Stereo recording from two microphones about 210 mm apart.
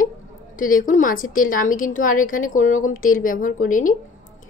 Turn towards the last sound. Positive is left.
turn(degrees=40)  # may be behind; listen again after turning